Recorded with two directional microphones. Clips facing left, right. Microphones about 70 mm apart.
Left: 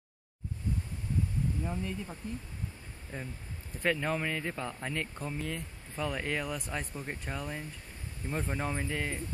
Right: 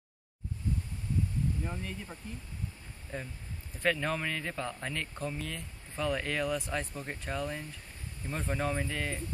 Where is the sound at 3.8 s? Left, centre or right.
Centre.